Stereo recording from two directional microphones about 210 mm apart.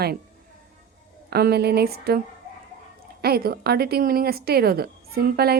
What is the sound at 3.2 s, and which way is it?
A woman's voice, 45° right (ahead or behind).